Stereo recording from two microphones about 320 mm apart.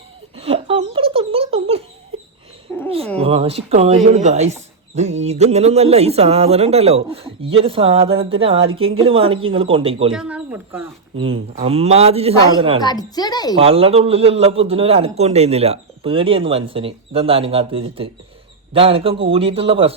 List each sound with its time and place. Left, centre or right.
0.3 s giggle: centre
2.7 s cat: centre
3.2 s a man's voice: centre
10.2 s speech: centre
11.2 s speech: centre
12.8 s a child's voice: centre
13.6 s a man's voice: centre